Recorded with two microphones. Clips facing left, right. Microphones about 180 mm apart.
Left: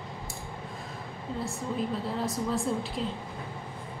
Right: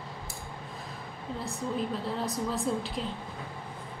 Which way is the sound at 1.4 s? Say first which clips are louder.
Even; centre (ahead or behind).